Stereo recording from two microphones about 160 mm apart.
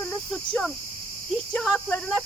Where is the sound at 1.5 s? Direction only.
Centre (ahead or behind).